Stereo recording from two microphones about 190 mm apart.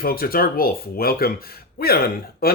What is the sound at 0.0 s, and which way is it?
Speech, 50° left (ahead or behind).